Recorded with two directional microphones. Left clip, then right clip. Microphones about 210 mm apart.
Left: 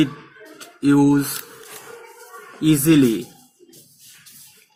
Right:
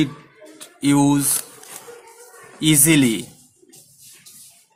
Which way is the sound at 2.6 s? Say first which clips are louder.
Left 1 dB; 30° right (ahead or behind).